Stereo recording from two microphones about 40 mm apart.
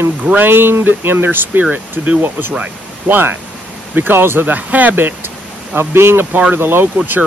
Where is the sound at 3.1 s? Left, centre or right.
Right.